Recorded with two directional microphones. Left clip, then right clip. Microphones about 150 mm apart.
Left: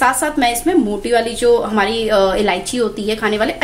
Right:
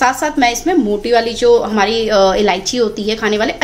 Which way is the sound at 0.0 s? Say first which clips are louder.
Right 2 dB; 20° right (ahead or behind).